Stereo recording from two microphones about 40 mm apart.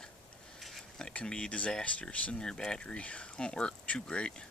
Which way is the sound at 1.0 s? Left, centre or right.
Left.